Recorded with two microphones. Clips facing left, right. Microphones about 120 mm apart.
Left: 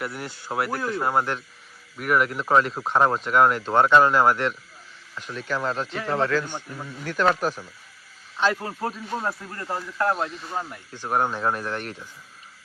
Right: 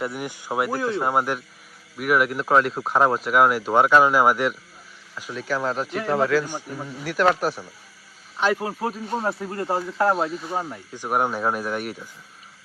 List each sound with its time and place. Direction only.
0.0 s speech: 15° right (ahead or behind)
0.8 s speech: centre (ahead or behind)
1.0 s speech: 10° right (ahead or behind)
9.6 s speech: 25° right (ahead or behind)
10.2 s speech: 5° right (ahead or behind)
10.5 s speech: 15° right (ahead or behind)